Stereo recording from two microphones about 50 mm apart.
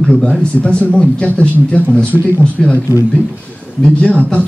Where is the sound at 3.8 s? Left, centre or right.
Centre.